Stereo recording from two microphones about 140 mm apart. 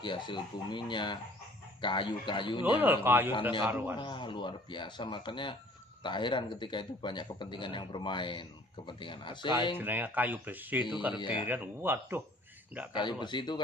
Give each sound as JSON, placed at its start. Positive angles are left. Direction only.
{"t": 0.0, "sound": "speech", "side_deg": 35}
{"t": 2.8, "sound": "speech", "side_deg": -15}
{"t": 3.9, "sound": "speech", "side_deg": 35}
{"t": 9.7, "sound": "speech", "side_deg": -15}
{"t": 11.1, "sound": "speech", "side_deg": 35}
{"t": 11.4, "sound": "speech", "side_deg": -15}
{"t": 12.9, "sound": "speech", "side_deg": 35}